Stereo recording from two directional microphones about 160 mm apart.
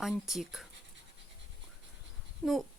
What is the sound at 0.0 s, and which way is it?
Speech, centre (ahead or behind).